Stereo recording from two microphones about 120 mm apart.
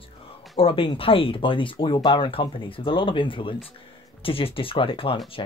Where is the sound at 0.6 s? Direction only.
50° left (ahead or behind).